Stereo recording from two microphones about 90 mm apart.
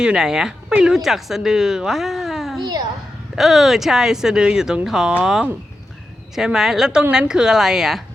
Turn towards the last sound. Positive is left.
turn(degrees=-5)  # may be behind; listen again after turning